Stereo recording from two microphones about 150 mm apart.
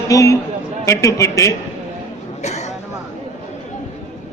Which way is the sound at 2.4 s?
50° left (ahead or behind).